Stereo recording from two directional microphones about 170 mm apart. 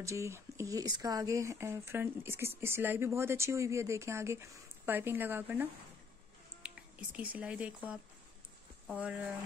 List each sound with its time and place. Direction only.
0.0 s speech: 15° right (ahead or behind)